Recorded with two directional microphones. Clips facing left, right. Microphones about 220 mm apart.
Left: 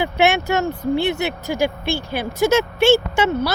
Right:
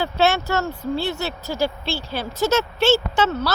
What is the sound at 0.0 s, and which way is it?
Speech, 15° left (ahead or behind).